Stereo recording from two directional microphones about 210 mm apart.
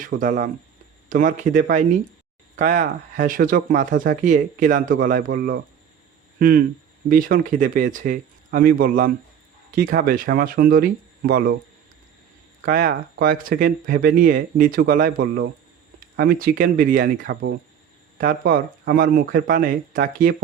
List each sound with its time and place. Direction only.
0.0 s speech: 40° right (ahead or behind)
7.1 s speech: 40° right (ahead or behind)
12.6 s speech: 45° right (ahead or behind)